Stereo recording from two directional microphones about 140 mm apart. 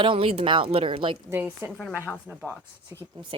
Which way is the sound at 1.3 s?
15° right (ahead or behind).